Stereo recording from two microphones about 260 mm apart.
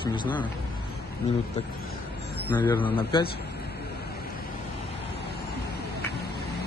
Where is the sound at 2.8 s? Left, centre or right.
Centre.